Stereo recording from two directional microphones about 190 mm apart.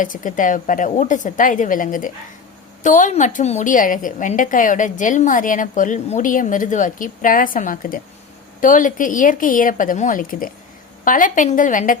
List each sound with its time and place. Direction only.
0.0 s a woman's voice: 45° left (ahead or behind)